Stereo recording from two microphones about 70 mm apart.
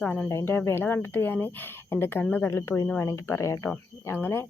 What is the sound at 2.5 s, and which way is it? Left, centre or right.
Speech, left.